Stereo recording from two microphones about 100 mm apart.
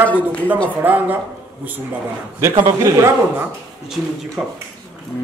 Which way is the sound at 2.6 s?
30° right (ahead or behind).